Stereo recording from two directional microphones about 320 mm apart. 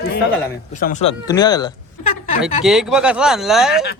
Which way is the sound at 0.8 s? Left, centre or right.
Left.